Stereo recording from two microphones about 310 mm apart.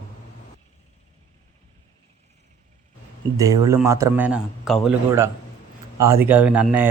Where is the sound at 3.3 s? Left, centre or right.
Centre.